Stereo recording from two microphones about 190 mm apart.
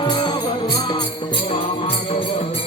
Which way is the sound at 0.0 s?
25° left (ahead or behind).